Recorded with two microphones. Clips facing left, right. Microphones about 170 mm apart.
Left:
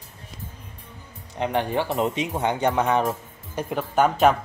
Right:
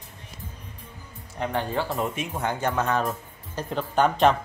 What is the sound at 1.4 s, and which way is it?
A man's voice, 20° left (ahead or behind).